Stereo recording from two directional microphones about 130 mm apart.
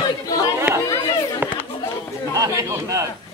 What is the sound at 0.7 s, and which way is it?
Speech, 10° right (ahead or behind).